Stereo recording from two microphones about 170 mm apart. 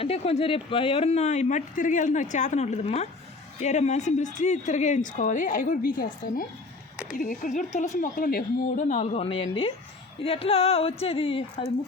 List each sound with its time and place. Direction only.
0.0 s speech: 35° left (ahead or behind); by 6.4 s 55° left (ahead or behind)
6.9 s a sound: 5° right (ahead or behind)
7.2 s speech: 50° left (ahead or behind); by 11.4 s 35° left (ahead or behind)